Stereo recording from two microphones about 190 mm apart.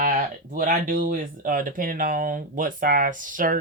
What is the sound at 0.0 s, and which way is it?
Speech, 45° right (ahead or behind).